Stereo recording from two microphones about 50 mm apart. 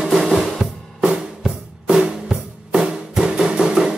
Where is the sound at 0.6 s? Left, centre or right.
Centre.